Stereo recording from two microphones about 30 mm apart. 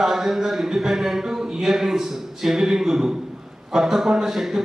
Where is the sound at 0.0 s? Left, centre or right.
Centre.